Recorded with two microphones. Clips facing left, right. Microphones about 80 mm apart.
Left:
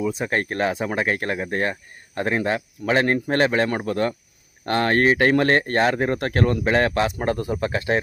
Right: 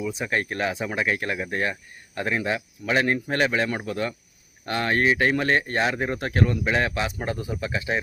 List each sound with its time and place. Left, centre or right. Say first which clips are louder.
0.0 s speech: left 3 dB; left